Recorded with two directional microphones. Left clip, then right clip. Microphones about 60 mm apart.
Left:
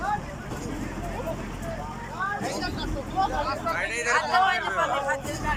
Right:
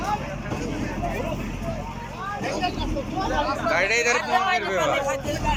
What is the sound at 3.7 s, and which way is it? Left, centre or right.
Speech, right.